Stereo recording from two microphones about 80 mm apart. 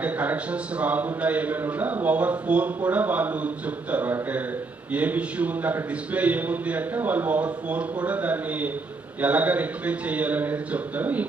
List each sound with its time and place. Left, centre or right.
0.0 s a man's voice: centre